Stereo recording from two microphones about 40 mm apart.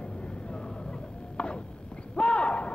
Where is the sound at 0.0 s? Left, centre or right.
Left.